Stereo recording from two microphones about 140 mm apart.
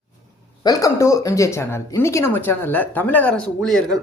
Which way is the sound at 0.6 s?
25° left (ahead or behind).